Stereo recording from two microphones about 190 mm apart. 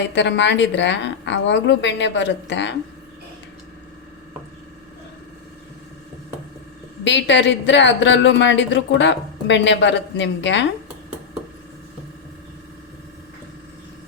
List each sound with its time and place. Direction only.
0.1 s speech: 70° left (ahead or behind)
7.0 s speech: 70° left (ahead or behind)